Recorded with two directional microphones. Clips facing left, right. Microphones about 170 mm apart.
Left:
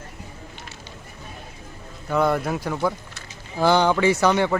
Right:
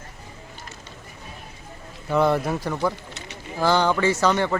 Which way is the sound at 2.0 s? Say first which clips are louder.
Right 1 dB; centre (ahead or behind).